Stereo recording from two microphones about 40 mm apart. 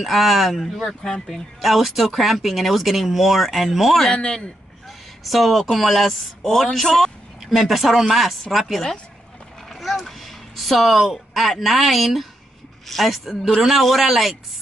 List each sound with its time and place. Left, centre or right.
0.0 s speech: centre
4.1 s a man's voice: left
4.8 s speech: centre
9.7 s a sound: centre
11.3 s speech: centre